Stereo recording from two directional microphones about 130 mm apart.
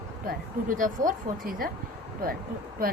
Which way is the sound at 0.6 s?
90° right.